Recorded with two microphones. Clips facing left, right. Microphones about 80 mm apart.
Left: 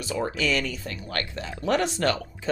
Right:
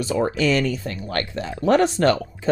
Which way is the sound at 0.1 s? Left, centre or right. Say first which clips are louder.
Right 5 dB; right.